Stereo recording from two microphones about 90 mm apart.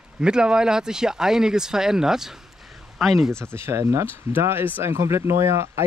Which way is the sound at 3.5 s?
30° right (ahead or behind).